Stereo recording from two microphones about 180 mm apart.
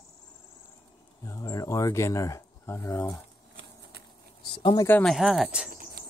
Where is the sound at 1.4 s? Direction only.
20° left (ahead or behind).